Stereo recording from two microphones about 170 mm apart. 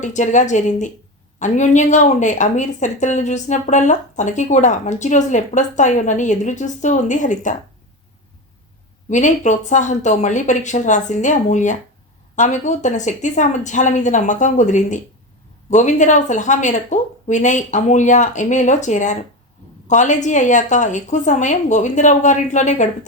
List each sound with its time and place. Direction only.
0.0 s speech: 45° left (ahead or behind)
9.0 s speech: 45° left (ahead or behind)